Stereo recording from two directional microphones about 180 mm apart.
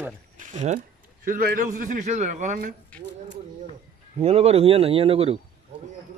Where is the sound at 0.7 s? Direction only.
55° right (ahead or behind).